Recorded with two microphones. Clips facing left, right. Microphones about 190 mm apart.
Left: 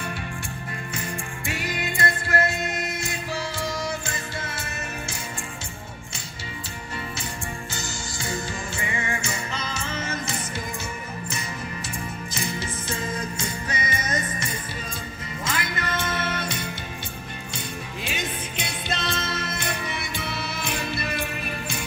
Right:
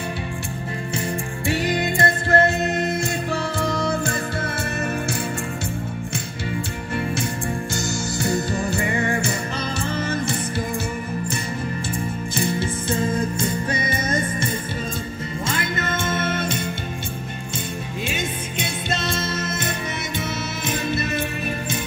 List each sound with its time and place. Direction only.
0.9 s music: 30° right (ahead or behind)
3.0 s music: 55° right (ahead or behind)
7.7 s music: 45° right (ahead or behind)
12.4 s music: 55° right (ahead or behind)
13.0 s music: 30° right (ahead or behind)
13.7 s music: 55° right (ahead or behind)
15.4 s music: 25° right (ahead or behind)
18.9 s music: 50° right (ahead or behind)